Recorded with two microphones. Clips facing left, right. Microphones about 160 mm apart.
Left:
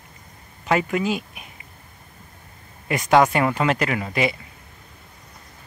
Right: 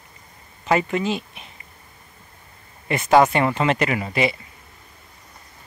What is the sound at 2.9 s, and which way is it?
Speech, 5° right (ahead or behind).